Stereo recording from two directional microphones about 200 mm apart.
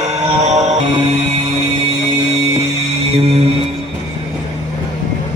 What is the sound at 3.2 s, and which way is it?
Music, 30° right (ahead or behind).